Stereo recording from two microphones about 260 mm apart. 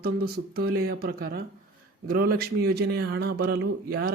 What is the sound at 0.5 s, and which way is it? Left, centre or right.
Speech, right.